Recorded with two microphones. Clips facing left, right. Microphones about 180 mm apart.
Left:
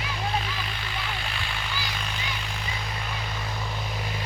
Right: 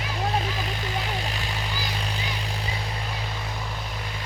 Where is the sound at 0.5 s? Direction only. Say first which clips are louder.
Right 5 dB; 40° right (ahead or behind).